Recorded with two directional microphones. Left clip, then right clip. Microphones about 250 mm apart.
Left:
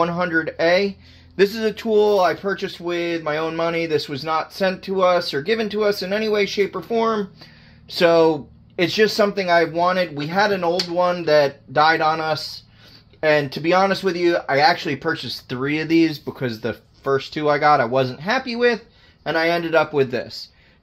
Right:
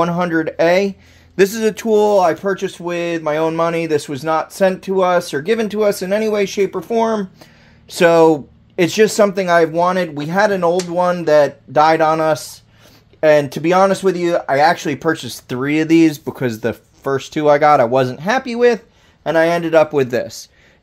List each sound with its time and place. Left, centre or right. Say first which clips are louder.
0.0 s speech: right 3 dB; right